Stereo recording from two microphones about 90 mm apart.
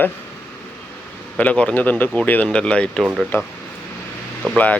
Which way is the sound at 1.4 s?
15° left (ahead or behind).